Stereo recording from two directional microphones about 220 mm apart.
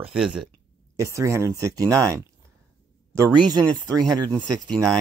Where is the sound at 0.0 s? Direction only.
5° right (ahead or behind).